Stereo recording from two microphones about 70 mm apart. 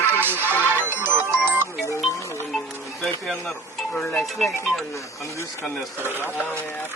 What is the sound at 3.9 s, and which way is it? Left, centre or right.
Speech, centre.